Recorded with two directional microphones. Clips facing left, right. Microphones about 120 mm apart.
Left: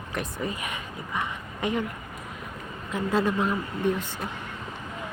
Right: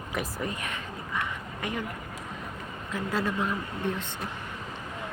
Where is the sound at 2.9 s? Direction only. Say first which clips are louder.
Left 5 dB; 20° left (ahead or behind).